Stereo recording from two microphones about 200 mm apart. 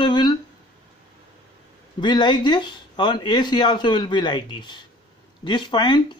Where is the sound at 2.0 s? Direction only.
20° left (ahead or behind).